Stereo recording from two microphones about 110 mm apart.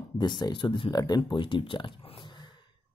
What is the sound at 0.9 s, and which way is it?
Speech, 40° left (ahead or behind).